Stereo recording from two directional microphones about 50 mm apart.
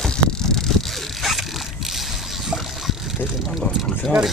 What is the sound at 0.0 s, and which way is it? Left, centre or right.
Bicycle, centre.